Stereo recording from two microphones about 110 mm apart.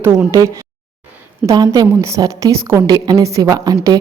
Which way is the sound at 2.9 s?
40° right (ahead or behind).